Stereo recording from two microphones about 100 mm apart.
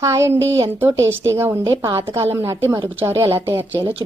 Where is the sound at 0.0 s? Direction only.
30° right (ahead or behind).